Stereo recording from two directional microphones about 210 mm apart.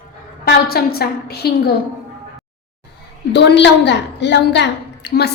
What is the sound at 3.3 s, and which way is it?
A woman's voice, 55° left (ahead or behind).